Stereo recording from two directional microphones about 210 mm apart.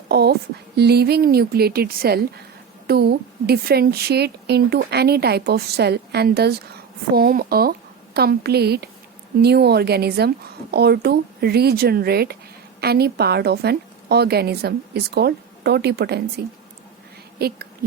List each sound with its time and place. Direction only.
0.1 s a sound: 50° right (ahead or behind)
0.8 s speech: 50° right (ahead or behind)
17.4 s speech: 50° right (ahead or behind)